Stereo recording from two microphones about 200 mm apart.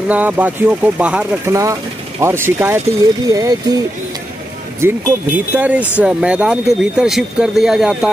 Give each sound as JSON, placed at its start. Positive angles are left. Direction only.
{"t": 0.1, "sound": "speech", "side_deg": -10}
{"t": 4.7, "sound": "speech", "side_deg": -10}